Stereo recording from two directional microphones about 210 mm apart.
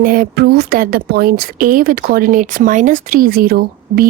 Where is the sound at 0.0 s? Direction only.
40° right (ahead or behind).